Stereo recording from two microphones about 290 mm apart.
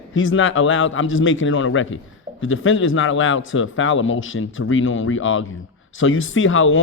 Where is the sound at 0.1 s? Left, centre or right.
Left.